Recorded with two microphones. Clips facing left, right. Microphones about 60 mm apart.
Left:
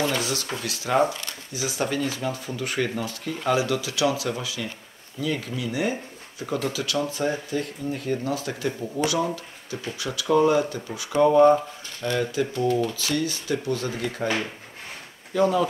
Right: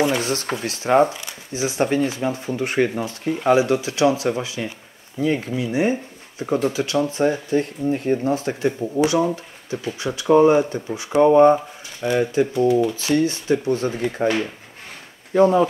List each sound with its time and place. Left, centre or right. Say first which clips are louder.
0.2 s speech: right 5 dB; right
11.5 s speech: right 1 dB; centre
12.9 s speech: right 7 dB; right
15.3 s speech: right 6 dB; right